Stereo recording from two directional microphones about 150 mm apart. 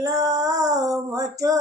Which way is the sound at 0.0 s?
20° right (ahead or behind).